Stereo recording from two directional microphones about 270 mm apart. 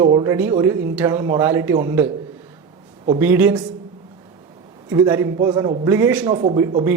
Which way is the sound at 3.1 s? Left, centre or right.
Centre.